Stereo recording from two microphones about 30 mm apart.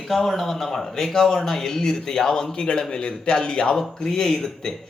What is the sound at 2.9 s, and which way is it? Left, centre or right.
Speech, left.